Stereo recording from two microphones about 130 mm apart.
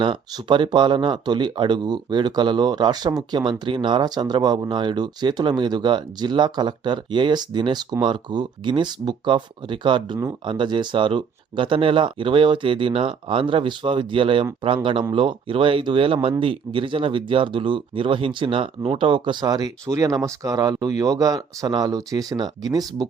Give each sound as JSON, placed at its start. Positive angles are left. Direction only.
{"t": 0.0, "sound": "speech", "side_deg": -40}